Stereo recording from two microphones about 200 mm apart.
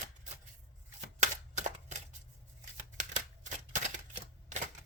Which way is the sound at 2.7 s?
40° right (ahead or behind).